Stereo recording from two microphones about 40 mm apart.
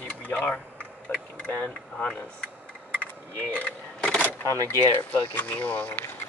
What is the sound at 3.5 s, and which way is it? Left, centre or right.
Vehicle, left.